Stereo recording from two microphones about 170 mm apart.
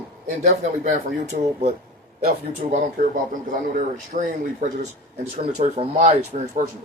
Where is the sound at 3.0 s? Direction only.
55° right (ahead or behind).